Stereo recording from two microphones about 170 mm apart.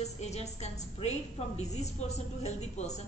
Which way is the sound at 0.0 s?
40° left (ahead or behind).